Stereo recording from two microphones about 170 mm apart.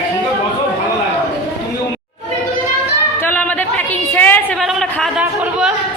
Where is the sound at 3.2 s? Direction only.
10° left (ahead or behind).